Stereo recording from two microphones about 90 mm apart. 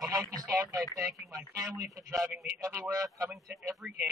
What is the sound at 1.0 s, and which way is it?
Speech, 35° right (ahead or behind).